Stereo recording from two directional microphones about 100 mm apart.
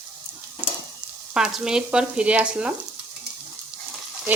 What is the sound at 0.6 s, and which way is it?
Stir, 20° right (ahead or behind).